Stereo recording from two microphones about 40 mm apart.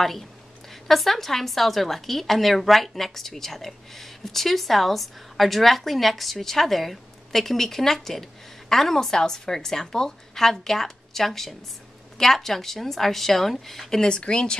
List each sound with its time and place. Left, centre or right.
0.8 s speech: centre
14.0 s speech: left